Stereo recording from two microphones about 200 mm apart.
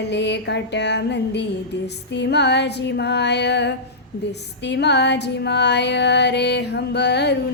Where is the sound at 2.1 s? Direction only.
60° left (ahead or behind).